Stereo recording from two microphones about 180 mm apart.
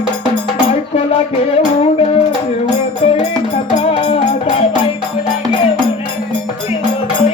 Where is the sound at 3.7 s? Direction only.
30° left (ahead or behind).